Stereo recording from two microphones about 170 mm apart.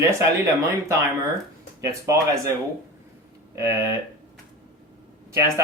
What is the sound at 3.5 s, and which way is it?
Speech, 20° right (ahead or behind).